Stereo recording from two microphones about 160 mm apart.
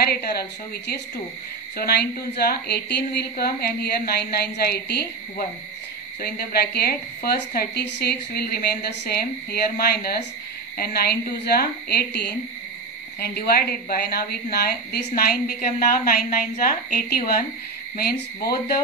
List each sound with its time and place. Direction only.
0.0 s a woman's voice: 70° left (ahead or behind); by 12.4 s 90° left
13.2 s a woman's voice: 80° left